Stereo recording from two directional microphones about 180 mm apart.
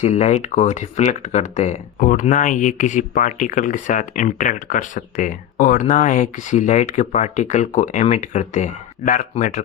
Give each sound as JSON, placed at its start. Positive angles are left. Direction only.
{"t": 0.0, "sound": "speech", "side_deg": 40}